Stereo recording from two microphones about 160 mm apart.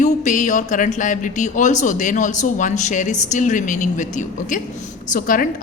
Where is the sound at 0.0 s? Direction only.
50° left (ahead or behind).